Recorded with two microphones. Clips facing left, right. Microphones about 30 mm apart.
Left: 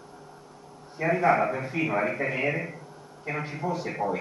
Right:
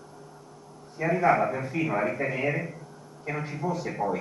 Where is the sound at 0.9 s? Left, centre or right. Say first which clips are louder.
Even; centre.